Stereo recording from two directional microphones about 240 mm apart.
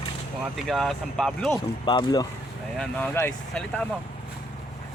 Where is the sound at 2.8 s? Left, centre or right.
Centre.